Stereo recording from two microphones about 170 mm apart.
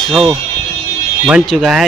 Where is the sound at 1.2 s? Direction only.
5° right (ahead or behind).